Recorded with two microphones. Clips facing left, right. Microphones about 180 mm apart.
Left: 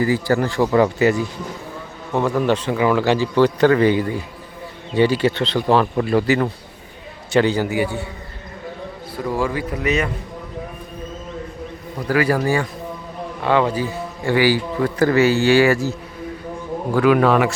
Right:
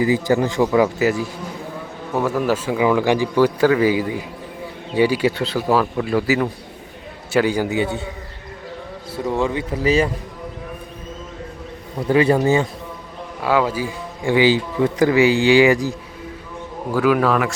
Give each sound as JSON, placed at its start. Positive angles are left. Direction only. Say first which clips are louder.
{"t": 0.0, "sound": "a man's voice", "louder": "right 1 dB", "side_deg": -15}
{"t": 0.7, "sound": "a man's voice", "louder": "left 1 dB", "side_deg": 0}
{"t": 9.2, "sound": "a man's voice", "louder": "right 1 dB", "side_deg": -20}
{"t": 12.0, "sound": "a man's voice", "louder": "right 3 dB", "side_deg": -25}
{"t": 13.4, "sound": "a man's voice", "louder": "left 1 dB", "side_deg": -5}
{"t": 16.9, "sound": "speech", "louder": "left 2 dB", "side_deg": 0}